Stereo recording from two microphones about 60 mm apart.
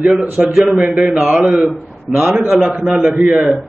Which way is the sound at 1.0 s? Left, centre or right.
Centre.